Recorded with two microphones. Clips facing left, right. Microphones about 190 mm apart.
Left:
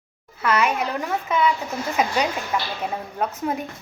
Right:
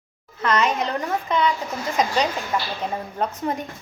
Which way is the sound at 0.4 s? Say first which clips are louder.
Even; 10° left (ahead or behind).